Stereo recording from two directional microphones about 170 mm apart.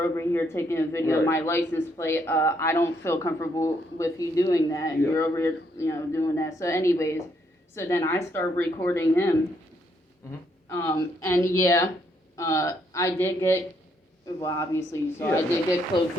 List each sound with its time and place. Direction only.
0.0 s speech: 15° left (ahead or behind)
10.7 s speech: 15° left (ahead or behind)